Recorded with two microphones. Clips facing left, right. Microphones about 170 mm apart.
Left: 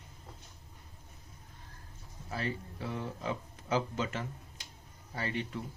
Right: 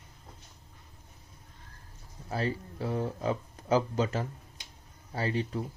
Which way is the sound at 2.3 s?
35° right (ahead or behind).